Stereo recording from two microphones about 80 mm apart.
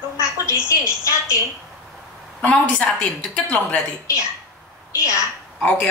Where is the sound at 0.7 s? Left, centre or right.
Left.